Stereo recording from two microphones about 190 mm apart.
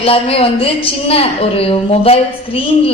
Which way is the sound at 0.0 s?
30° left (ahead or behind).